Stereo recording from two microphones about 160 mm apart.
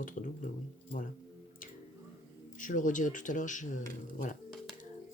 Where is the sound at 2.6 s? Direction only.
55° left (ahead or behind).